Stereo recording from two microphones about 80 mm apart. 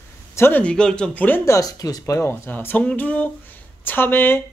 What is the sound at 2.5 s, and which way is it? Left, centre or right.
Speech, left.